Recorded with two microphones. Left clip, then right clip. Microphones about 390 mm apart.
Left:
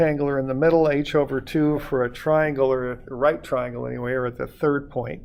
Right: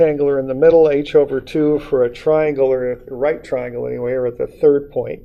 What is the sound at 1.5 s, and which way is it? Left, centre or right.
Speech, left.